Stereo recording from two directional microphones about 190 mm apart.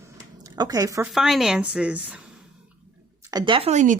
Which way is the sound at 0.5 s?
20° right (ahead or behind).